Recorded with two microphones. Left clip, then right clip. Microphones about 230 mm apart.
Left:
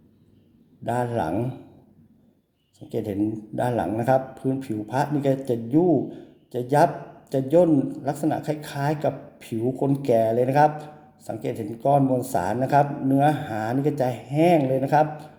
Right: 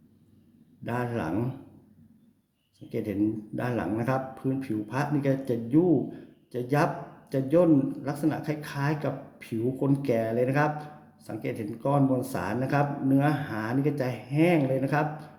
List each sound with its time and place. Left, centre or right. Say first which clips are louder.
0.9 s a man's voice: left 6 dB; centre
2.9 s a man's voice: left 3 dB; centre